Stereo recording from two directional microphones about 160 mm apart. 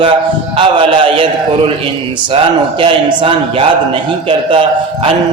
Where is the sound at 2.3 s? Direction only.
35° right (ahead or behind).